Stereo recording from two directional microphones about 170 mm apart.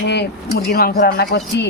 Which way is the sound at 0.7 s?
65° left (ahead or behind).